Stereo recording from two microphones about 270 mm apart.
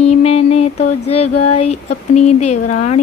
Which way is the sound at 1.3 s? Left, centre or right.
Left.